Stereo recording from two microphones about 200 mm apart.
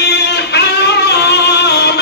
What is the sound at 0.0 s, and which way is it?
Music, 55° left (ahead or behind).